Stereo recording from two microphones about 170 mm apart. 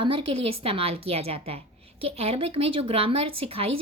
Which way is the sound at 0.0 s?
30° right (ahead or behind).